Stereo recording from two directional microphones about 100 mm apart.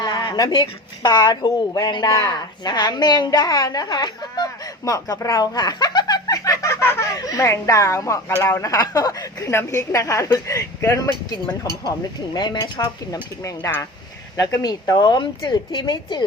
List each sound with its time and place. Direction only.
0.0 s a woman's voice: 40° left (ahead or behind)
9.5 s a woman's voice: 30° left (ahead or behind)
11.9 s speech: 40° left (ahead or behind)
13.4 s speech: 25° left (ahead or behind)
14.3 s speech: 40° left (ahead or behind)